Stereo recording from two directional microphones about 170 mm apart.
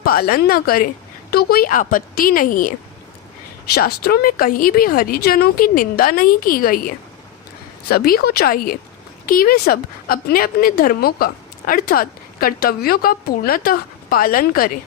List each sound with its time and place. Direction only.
0.0 s a woman's voice: 60° left (ahead or behind)
3.8 s a woman's voice: 65° left (ahead or behind)